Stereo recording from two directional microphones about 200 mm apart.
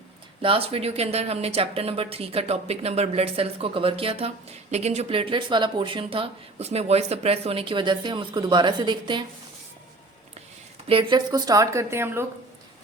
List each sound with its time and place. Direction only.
0.4 s speech: 25° right (ahead or behind)
10.8 s speech: 25° right (ahead or behind)